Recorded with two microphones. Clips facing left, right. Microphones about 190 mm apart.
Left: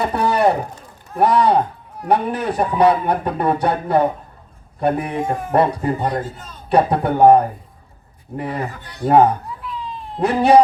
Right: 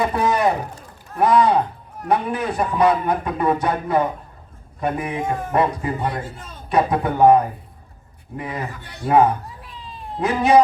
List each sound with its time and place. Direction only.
0.0 s a sound: 35° left (ahead or behind)
1.2 s a man's voice: 35° left (ahead or behind)
8.6 s speech: 55° left (ahead or behind)
10.2 s a man's voice: 35° left (ahead or behind)